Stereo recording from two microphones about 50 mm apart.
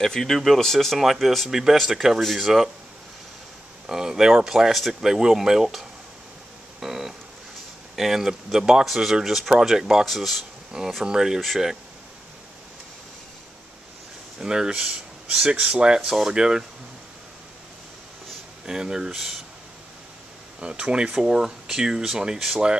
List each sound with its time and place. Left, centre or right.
0.0 s speech: centre
3.8 s speech: centre
6.8 s a sound: centre
7.9 s speech: centre
10.7 s speech: centre
14.4 s speech: centre
18.7 s speech: centre
20.6 s speech: centre